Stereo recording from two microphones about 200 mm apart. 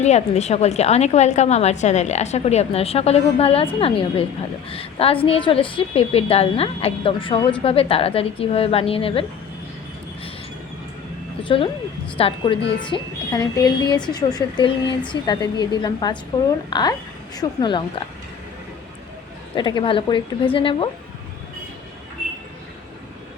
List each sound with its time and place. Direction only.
0.0 s a woman's voice: 35° left (ahead or behind)
11.4 s a woman's voice: 25° left (ahead or behind)
19.5 s a woman's voice: 25° left (ahead or behind)